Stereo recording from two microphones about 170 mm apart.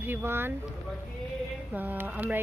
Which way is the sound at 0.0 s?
10° right (ahead or behind).